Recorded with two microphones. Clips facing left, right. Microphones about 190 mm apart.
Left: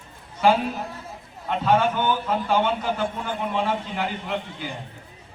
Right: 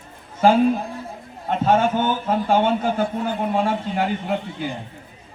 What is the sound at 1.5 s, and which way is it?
A man's voice, 45° right (ahead or behind).